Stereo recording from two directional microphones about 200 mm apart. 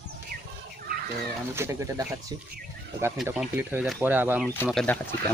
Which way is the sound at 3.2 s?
5° right (ahead or behind).